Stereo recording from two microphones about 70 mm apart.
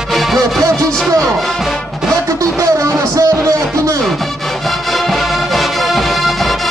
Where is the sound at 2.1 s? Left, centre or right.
Right.